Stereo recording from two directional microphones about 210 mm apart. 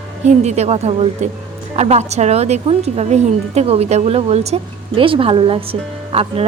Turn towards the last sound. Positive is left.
turn(degrees=-25)  # may be behind; listen again after turning